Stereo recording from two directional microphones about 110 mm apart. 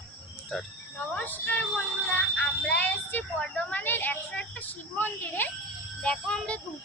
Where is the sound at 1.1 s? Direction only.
15° left (ahead or behind).